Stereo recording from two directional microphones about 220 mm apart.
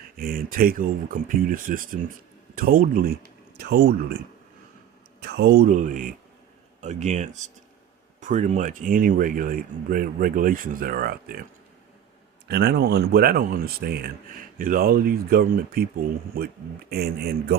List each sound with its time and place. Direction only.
0.2 s speech: 40° right (ahead or behind)
5.2 s speech: 50° right (ahead or behind)
12.5 s speech: 45° right (ahead or behind)